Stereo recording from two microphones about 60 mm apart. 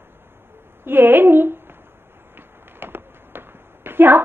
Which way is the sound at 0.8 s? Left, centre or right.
Right.